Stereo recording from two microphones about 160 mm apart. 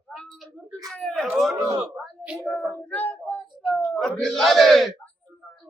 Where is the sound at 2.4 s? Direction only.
10° left (ahead or behind).